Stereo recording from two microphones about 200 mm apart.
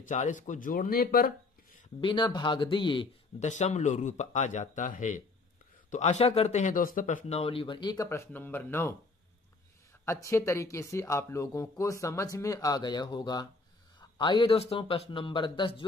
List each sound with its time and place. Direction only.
0.0 s speech: 40° left (ahead or behind)
2.0 s speech: 25° left (ahead or behind)
3.4 s speech: 35° left (ahead or behind); by 8.9 s 10° left (ahead or behind)
10.0 s speech: 15° left (ahead or behind)